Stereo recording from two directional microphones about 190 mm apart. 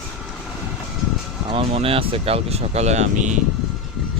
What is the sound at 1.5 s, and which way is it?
Speech, 30° right (ahead or behind).